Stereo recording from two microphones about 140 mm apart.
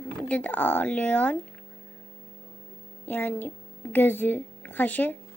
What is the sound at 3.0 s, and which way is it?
A woman's voice, 15° left (ahead or behind).